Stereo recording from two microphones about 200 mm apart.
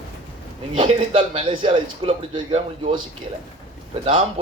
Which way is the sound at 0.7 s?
25° right (ahead or behind).